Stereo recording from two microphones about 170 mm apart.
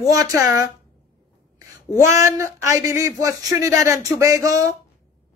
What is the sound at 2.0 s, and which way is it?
Music, 15° right (ahead or behind).